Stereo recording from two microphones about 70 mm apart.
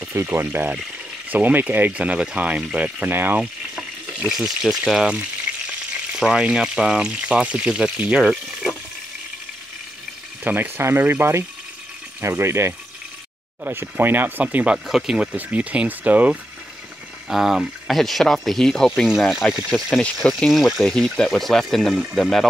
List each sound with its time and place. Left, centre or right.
0.1 s speech: right
4.1 s frying: centre
4.4 s speech: centre
6.1 s speech: centre
10.4 s speech: right
10.8 s speech: right
13.7 s speech: right
14.9 s speech: centre
15.3 s speech: centre
17.3 s speech: centre
20.5 s speech: centre